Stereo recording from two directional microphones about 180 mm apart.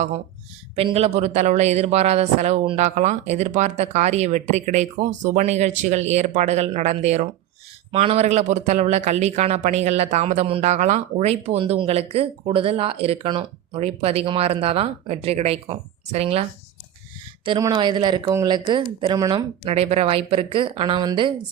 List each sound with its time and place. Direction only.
0.8 s a man's voice: 35° right (ahead or behind)
17.4 s speech: 25° right (ahead or behind)
19.6 s a man's voice: 35° right (ahead or behind)